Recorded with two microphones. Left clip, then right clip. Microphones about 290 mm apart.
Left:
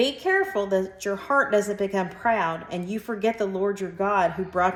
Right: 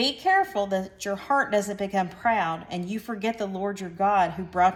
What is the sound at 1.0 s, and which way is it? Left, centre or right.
Speech, centre.